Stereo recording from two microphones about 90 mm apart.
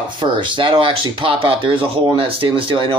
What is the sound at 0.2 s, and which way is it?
Speech, 60° right (ahead or behind).